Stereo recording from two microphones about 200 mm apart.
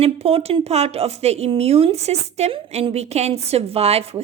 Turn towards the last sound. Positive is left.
turn(degrees=-30)  # may be behind; listen again after turning